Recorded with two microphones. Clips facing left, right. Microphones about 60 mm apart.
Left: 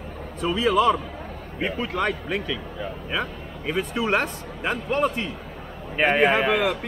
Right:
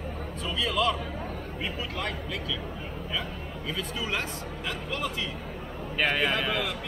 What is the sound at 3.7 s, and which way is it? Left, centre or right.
Speech, left.